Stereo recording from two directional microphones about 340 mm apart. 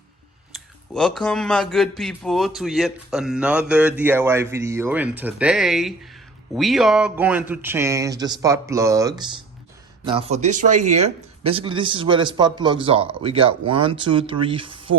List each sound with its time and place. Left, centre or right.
0.5 s a man's voice: centre